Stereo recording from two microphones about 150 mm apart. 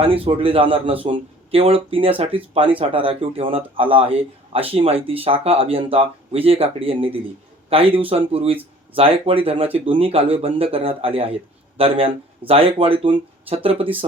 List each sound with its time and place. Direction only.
0.0 s speech: 40° right (ahead or behind)